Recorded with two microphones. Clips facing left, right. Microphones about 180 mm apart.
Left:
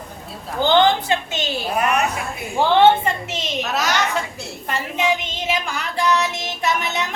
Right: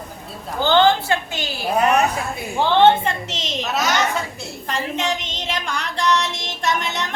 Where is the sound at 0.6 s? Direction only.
15° left (ahead or behind).